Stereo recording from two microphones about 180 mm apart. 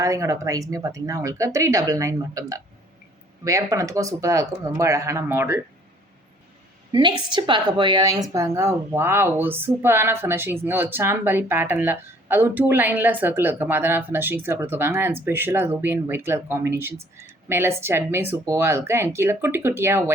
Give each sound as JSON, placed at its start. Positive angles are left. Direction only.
{"t": 0.0, "sound": "a woman's voice", "side_deg": -15}
{"t": 6.9, "sound": "a woman's voice", "side_deg": -25}